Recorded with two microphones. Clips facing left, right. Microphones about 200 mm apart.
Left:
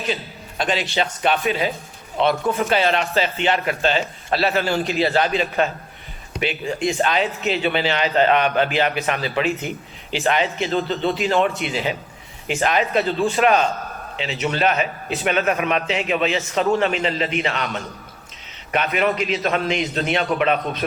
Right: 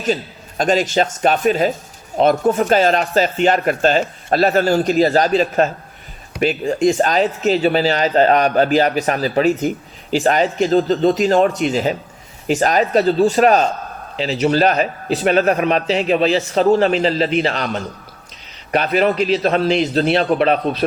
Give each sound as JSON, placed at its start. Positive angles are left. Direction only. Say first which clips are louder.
{"t": 0.0, "sound": "speech", "louder": "right 6 dB", "side_deg": -45}